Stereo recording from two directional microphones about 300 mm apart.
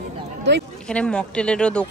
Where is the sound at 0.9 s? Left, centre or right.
Centre.